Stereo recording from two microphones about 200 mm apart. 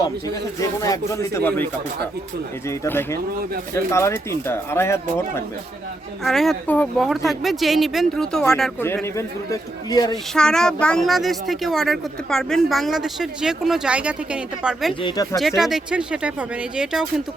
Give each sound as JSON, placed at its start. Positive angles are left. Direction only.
{"t": 0.8, "sound": "speech", "side_deg": 15}
{"t": 2.6, "sound": "speech", "side_deg": 10}
{"t": 6.2, "sound": "speech", "side_deg": 0}
{"t": 8.9, "sound": "speech", "side_deg": 15}
{"t": 10.3, "sound": "speech", "side_deg": 5}
{"t": 15.0, "sound": "speech", "side_deg": 20}
{"t": 15.4, "sound": "speech", "side_deg": 0}